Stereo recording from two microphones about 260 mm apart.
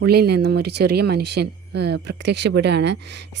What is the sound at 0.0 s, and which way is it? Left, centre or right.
Speech, right.